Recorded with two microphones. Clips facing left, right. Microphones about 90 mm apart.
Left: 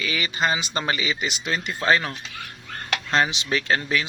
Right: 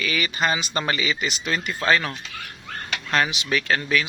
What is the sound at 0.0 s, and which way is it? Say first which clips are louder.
Speech: right 1 dB; 20° left (ahead or behind).